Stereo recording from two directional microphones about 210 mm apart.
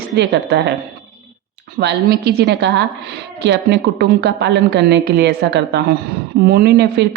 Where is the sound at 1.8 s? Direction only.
50° right (ahead or behind).